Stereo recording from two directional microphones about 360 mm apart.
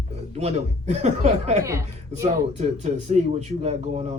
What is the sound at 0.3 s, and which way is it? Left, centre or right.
Speech, centre.